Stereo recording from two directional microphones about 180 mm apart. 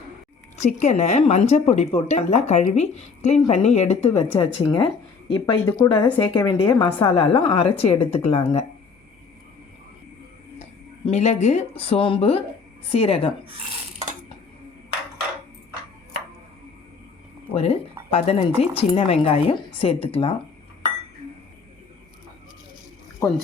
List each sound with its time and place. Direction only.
0.5 s a woman's voice: 40° left (ahead or behind)
10.6 s speech: 35° left (ahead or behind)
17.5 s speech: 35° left (ahead or behind)